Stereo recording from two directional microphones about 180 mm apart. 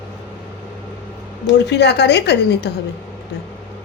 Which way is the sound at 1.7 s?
70° left (ahead or behind).